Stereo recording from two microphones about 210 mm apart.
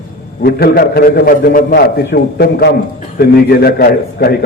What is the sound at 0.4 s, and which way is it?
A man's voice, 45° left (ahead or behind).